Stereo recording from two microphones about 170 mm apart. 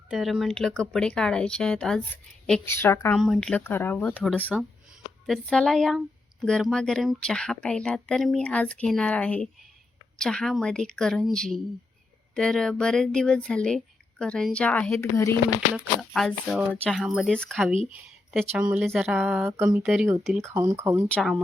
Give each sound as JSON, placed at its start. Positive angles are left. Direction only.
{"t": 0.1, "sound": "speech", "side_deg": 0}
{"t": 3.2, "sound": "speech", "side_deg": 0}
{"t": 15.7, "sound": "speech", "side_deg": -5}
{"t": 20.5, "sound": "speech", "side_deg": -10}
{"t": 21.1, "sound": "speech", "side_deg": 0}